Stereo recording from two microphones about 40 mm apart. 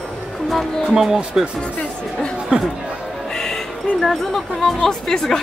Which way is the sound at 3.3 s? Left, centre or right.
Centre.